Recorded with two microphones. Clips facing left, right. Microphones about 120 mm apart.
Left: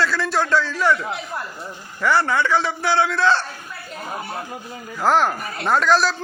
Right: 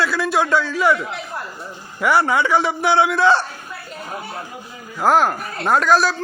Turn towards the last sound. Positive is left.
turn(degrees=-5)  # may be behind; listen again after turning